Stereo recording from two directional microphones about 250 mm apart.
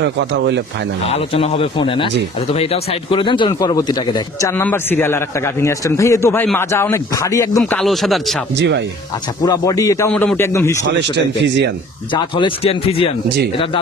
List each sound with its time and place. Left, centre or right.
0.0 s speech: right
1.0 s a man's voice: left
7.8 s speech: centre
8.5 s speech: right
9.4 s speech: centre
10.9 s speech: right
12.1 s a man's voice: centre